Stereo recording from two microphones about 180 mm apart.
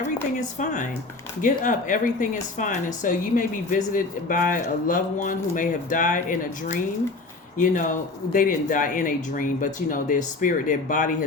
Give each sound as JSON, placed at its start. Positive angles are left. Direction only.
{"t": 0.0, "sound": "speech", "side_deg": 45}